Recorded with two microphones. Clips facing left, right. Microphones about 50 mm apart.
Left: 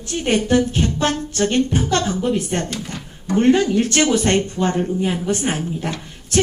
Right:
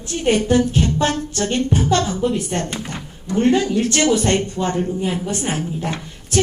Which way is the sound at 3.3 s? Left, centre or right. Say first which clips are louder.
Left 2 dB; left.